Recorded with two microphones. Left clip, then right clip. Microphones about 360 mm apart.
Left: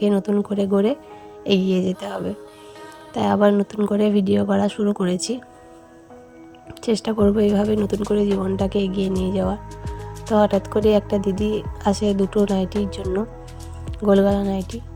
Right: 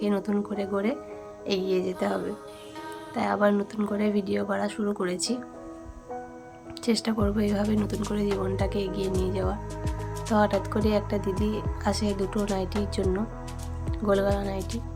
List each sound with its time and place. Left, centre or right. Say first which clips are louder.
0.0 s speech: left 7 dB; centre
6.8 s speech: left 8 dB; centre